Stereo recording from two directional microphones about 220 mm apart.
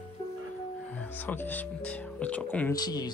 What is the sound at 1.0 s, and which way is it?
Speech, 10° left (ahead or behind).